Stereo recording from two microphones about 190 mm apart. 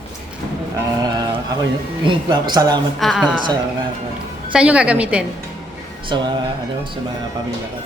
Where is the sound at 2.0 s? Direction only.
25° right (ahead or behind).